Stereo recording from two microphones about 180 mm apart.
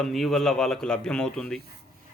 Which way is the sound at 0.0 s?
Centre (ahead or behind).